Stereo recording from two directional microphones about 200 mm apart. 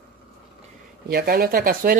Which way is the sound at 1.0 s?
50° right (ahead or behind).